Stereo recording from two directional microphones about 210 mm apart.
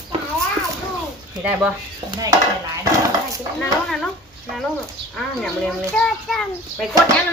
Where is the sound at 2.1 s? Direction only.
15° right (ahead or behind).